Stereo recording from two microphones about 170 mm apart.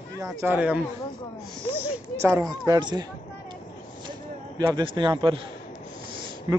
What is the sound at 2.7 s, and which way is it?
Speech, 25° right (ahead or behind).